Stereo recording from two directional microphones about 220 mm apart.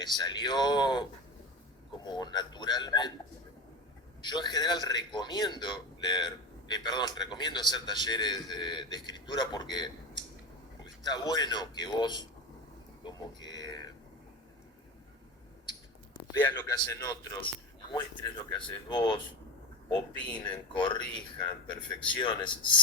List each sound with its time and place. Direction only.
0.0 s a man's voice: 20° left (ahead or behind)
2.0 s a man's voice: 20° left (ahead or behind)
4.2 s a man's voice: 20° left (ahead or behind)
13.0 s a sound: 20° left (ahead or behind)
16.4 s a man's voice: 10° left (ahead or behind)
18.5 s a man's voice: 20° left (ahead or behind)